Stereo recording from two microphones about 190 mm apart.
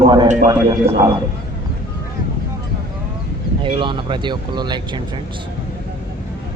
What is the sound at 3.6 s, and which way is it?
A man's voice, 25° right (ahead or behind).